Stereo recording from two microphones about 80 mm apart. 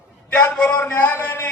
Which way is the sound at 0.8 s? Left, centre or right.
Left.